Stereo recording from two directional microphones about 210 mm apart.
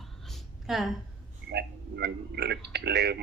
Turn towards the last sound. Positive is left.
turn(degrees=-50)  # may be behind; listen again after turning